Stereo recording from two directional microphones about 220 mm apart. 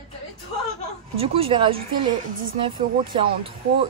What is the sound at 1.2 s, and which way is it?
Speech, 25° right (ahead or behind).